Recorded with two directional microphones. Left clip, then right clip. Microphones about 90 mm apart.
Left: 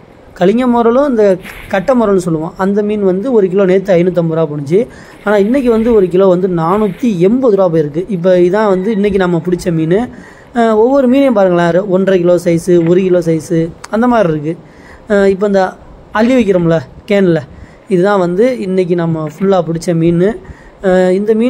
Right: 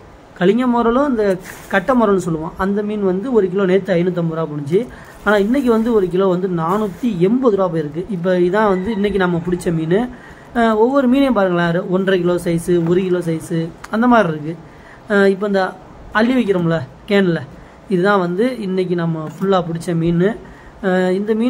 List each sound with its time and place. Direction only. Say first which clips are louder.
0.4 s speech: left 5 dB; 65° left (ahead or behind)
0.7 s speech: left 6 dB; 50° left (ahead or behind)
7.1 s speech: left 5 dB; 65° left (ahead or behind)
19.1 s speech: left 4 dB; 45° left (ahead or behind)